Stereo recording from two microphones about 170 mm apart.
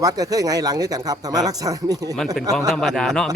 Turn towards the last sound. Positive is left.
turn(degrees=5)  # may be behind; listen again after turning